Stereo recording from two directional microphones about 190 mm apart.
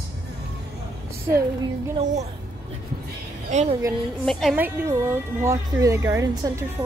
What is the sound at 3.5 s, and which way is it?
Speech, 35° right (ahead or behind).